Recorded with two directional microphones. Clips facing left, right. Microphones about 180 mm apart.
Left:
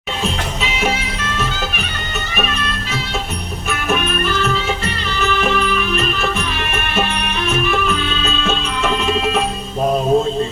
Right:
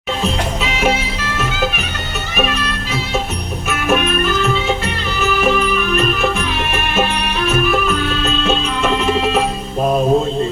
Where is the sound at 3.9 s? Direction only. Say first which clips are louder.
Right 3 dB; 5° right (ahead or behind).